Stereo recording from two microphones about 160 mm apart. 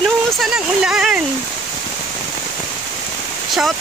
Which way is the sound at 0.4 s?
Centre (ahead or behind).